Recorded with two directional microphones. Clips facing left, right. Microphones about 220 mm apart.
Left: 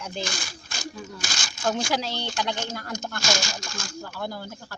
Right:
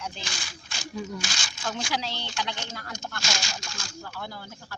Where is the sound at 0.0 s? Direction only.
45° left (ahead or behind).